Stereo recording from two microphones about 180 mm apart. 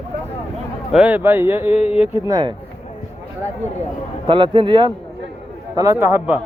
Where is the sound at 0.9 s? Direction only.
5° right (ahead or behind).